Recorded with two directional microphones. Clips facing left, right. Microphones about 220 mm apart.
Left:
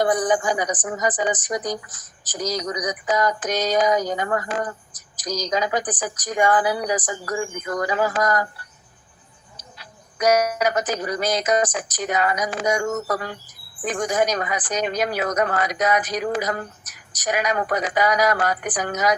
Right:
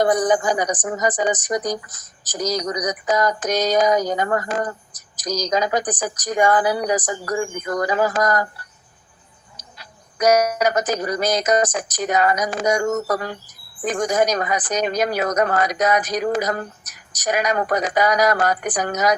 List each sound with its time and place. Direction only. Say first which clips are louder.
0.0 s a woman's voice: right 2 dB; 40° right (ahead or behind)
9.6 s a woman's voice: left 1 dB; 40° right (ahead or behind)